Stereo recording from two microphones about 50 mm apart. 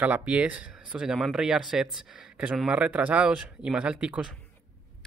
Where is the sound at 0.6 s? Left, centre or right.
Centre.